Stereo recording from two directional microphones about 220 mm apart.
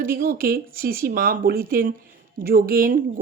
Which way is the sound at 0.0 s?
40° right (ahead or behind).